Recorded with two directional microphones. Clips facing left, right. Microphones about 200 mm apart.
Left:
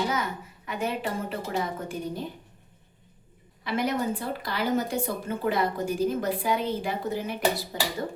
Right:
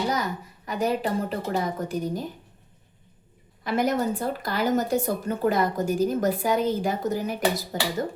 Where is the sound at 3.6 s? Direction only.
45° right (ahead or behind).